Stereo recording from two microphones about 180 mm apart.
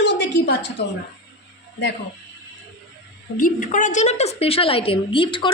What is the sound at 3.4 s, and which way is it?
A woman's voice, 50° left (ahead or behind).